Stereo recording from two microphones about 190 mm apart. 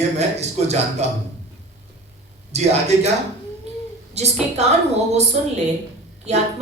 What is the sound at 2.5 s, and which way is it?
Speech, 35° right (ahead or behind).